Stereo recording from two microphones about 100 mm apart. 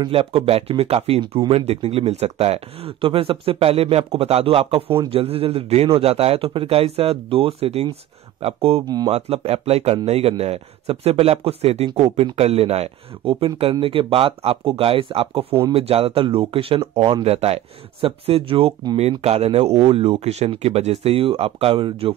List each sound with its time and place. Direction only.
0.1 s speech: 65° right (ahead or behind)
8.4 s speech: 85° right
8.8 s speech: 40° right (ahead or behind)
9.1 s speech: 90° right
10.0 s speech: 80° right; by 15.4 s 65° right (ahead or behind)
15.7 s speech: 75° right (ahead or behind)
18.0 s speech: 70° right (ahead or behind)
18.9 s speech: 90° right; by 22.1 s 65° right (ahead or behind)